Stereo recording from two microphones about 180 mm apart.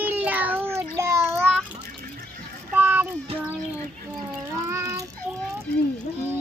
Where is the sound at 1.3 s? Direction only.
5° left (ahead or behind).